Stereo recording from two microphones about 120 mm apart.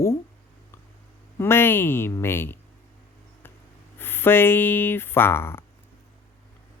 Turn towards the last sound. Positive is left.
turn(degrees=20)  # may be behind; listen again after turning